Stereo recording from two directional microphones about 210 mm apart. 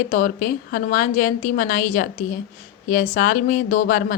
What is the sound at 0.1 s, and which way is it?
A woman's voice, 40° left (ahead or behind).